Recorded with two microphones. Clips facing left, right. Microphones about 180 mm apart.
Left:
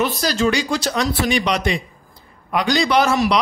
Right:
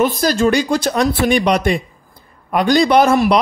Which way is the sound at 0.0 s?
50° right (ahead or behind).